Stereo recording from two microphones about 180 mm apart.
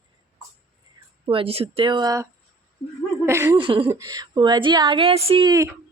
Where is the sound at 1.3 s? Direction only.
30° right (ahead or behind).